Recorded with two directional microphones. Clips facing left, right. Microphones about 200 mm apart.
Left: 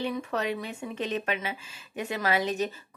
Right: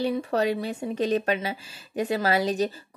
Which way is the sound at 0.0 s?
35° right (ahead or behind).